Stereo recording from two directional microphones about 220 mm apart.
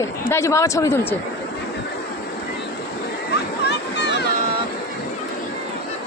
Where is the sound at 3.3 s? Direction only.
50° left (ahead or behind).